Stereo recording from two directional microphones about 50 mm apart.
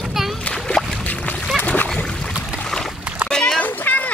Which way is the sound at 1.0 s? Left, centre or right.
Left.